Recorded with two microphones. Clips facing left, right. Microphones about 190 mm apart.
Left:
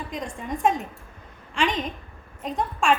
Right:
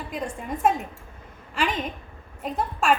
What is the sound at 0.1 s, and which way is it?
A woman's voice, 5° right (ahead or behind).